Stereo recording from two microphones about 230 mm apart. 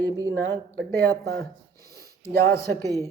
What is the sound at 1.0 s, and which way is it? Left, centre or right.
Speech, centre.